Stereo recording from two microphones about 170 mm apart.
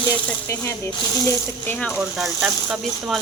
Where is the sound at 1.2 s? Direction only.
10° left (ahead or behind).